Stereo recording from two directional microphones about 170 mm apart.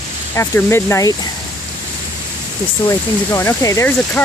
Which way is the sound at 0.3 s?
15° left (ahead or behind).